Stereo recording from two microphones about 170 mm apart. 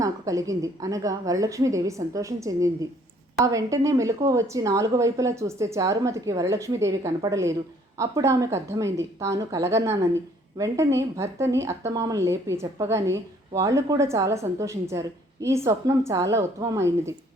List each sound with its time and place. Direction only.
0.0 s a woman's voice: 20° right (ahead or behind)